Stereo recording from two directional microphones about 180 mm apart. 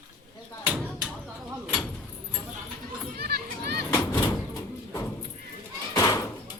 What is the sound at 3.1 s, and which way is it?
Children playing, 60° right (ahead or behind).